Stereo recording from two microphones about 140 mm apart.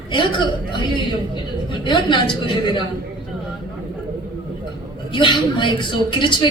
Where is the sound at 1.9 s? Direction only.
35° left (ahead or behind).